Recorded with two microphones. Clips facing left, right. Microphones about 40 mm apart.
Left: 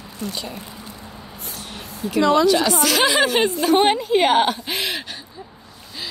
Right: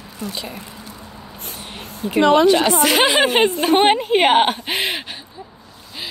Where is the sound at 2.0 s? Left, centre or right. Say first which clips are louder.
Right 3 dB; right.